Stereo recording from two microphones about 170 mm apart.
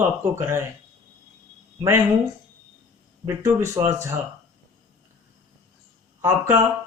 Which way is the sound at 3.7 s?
15° right (ahead or behind).